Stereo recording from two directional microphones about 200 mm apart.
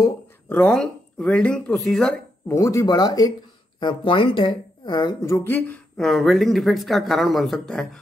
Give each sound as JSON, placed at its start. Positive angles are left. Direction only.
{"t": 0.5, "sound": "a woman's voice", "side_deg": 5}
{"t": 2.4, "sound": "a woman's voice", "side_deg": 15}